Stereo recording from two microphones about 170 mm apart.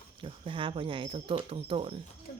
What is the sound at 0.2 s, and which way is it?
Speech, 30° right (ahead or behind).